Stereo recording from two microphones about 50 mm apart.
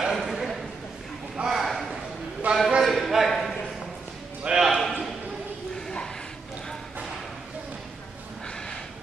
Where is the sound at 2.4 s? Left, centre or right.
Right.